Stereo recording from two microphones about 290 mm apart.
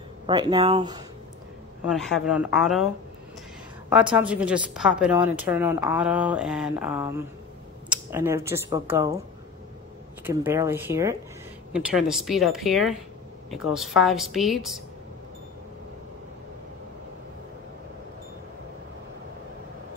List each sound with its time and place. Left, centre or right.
0.3 s speech: centre
1.9 s speech: centre
3.9 s speech: centre
10.2 s speech: centre